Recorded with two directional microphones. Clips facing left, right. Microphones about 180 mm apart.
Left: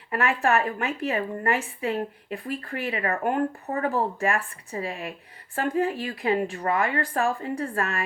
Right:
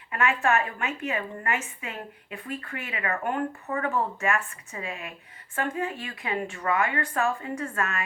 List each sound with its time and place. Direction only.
0.1 s a woman's voice: 35° left (ahead or behind)